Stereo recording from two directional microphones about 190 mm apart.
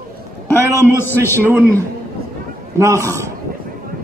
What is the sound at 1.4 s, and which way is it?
A man's voice, 10° right (ahead or behind).